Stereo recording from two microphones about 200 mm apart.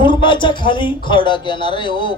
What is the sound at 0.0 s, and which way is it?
Speech, 25° left (ahead or behind).